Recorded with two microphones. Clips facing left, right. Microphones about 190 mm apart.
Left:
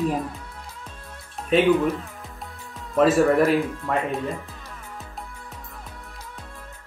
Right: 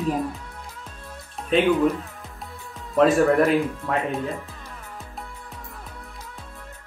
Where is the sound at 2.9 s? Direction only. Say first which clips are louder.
Even; centre (ahead or behind).